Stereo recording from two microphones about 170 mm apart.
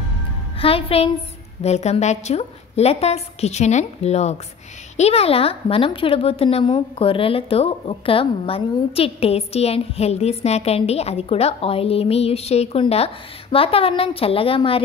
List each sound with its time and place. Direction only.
0.6 s a woman's voice: 35° left (ahead or behind)